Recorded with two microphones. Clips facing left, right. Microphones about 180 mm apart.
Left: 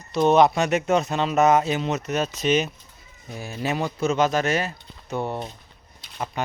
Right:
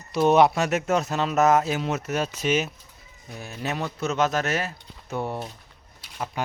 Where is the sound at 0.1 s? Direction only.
10° right (ahead or behind).